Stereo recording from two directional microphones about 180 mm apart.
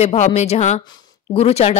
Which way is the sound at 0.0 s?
35° left (ahead or behind).